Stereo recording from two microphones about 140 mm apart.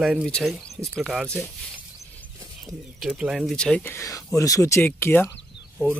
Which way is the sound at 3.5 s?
5° left (ahead or behind).